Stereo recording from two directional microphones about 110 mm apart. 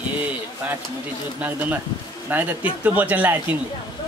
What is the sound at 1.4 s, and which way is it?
Speech, 15° right (ahead or behind).